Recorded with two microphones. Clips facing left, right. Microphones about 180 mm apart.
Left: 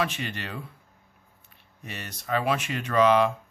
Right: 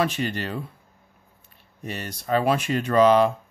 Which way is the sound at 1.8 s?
35° right (ahead or behind).